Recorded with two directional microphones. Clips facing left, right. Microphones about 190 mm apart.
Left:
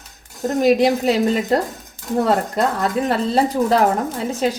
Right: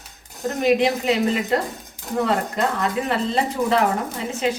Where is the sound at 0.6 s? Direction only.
40° left (ahead or behind).